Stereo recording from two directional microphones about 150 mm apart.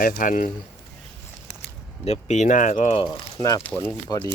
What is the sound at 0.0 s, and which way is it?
Speech, 65° left (ahead or behind).